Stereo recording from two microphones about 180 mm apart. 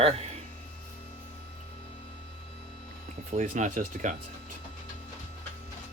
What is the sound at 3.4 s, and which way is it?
Speech, 45° right (ahead or behind).